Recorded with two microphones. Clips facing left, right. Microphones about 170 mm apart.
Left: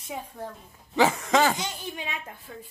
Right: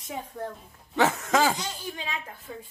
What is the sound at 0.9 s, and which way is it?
Speech, centre (ahead or behind).